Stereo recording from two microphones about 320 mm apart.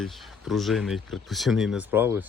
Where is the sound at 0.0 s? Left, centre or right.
Centre.